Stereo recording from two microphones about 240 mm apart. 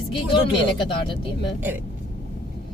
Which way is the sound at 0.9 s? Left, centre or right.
Centre.